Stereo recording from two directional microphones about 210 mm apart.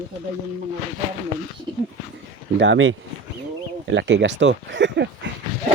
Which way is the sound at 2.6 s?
60° right (ahead or behind).